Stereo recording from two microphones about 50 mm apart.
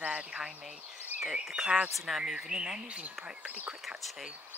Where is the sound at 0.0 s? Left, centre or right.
Right.